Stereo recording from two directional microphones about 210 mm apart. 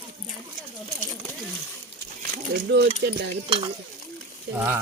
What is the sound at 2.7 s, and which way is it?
Stir, 50° right (ahead or behind).